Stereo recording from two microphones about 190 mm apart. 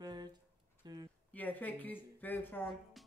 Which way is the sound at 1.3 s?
10° left (ahead or behind).